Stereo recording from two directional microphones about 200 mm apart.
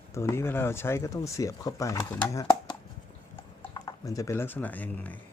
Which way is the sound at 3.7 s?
20° left (ahead or behind).